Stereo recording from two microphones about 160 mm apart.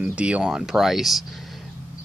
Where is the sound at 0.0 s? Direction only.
5° right (ahead or behind).